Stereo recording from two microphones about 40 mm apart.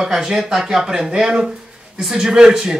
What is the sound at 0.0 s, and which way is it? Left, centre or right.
Speech, centre.